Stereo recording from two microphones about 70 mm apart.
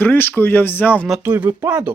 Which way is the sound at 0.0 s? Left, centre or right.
Left.